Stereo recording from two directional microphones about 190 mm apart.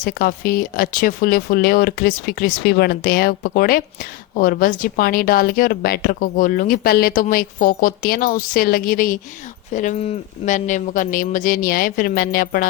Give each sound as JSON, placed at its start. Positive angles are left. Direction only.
{"t": 0.0, "sound": "speech", "side_deg": 50}